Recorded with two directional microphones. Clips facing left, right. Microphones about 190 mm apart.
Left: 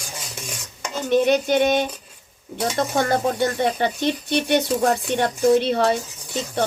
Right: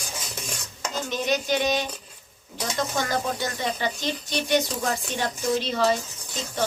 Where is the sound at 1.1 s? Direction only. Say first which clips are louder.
Left 9 dB; 55° left (ahead or behind).